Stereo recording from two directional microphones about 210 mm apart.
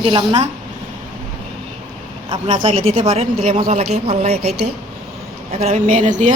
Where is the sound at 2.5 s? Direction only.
35° right (ahead or behind).